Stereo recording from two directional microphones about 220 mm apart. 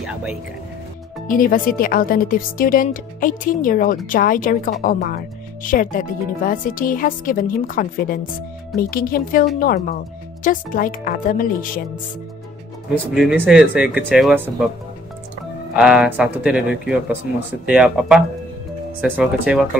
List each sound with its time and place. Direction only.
0.0 s speech: 5° right (ahead or behind)
1.2 s speech: 40° left (ahead or behind)
13.1 s speech: centre (ahead or behind)
15.7 s speech: 5° right (ahead or behind)